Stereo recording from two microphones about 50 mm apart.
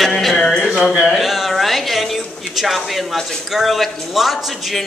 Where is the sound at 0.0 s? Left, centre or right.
Centre.